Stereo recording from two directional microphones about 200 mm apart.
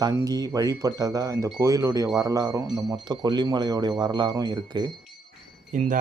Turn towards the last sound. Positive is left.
turn(degrees=-35)  # may be behind; listen again after turning